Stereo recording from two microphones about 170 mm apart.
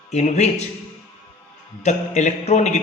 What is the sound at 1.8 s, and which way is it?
A man's voice, 45° left (ahead or behind).